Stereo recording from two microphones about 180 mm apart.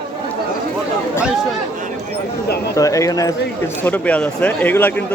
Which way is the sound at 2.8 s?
20° left (ahead or behind).